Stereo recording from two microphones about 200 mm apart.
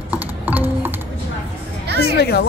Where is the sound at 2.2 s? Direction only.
55° left (ahead or behind).